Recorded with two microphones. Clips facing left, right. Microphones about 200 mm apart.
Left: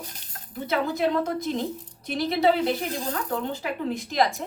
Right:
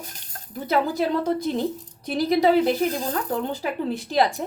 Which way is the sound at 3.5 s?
35° right (ahead or behind).